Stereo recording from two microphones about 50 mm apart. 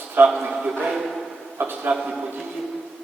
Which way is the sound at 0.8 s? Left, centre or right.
Centre.